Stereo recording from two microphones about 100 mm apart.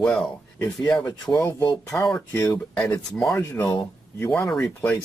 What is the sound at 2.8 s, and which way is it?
Speech, 10° left (ahead or behind).